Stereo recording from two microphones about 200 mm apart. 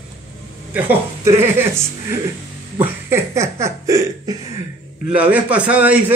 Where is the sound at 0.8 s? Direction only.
10° right (ahead or behind).